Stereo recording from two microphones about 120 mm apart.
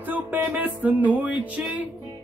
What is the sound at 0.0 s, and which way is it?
Music, 15° right (ahead or behind).